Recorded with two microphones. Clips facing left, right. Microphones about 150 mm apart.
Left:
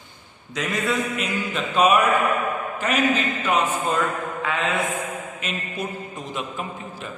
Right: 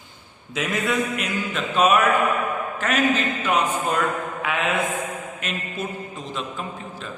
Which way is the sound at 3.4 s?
5° right (ahead or behind).